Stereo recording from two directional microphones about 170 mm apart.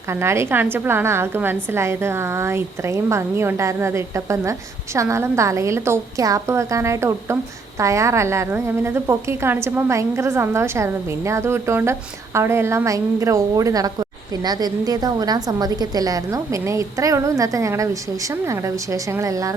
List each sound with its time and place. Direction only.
0.1 s a woman's voice: 15° right (ahead or behind)